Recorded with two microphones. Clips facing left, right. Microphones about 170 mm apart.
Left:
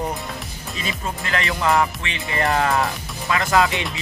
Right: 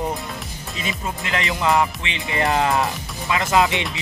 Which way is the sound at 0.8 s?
20° right (ahead or behind).